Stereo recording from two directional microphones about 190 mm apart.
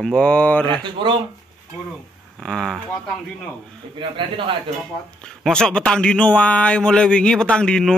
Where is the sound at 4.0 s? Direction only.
25° right (ahead or behind).